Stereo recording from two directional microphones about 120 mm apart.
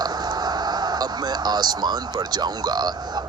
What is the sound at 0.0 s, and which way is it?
Speech, 35° right (ahead or behind).